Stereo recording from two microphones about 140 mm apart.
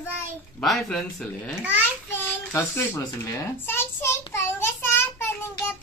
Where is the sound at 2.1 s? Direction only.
15° left (ahead or behind).